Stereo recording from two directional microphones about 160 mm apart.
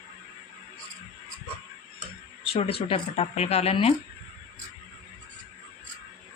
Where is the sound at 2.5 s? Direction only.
35° left (ahead or behind).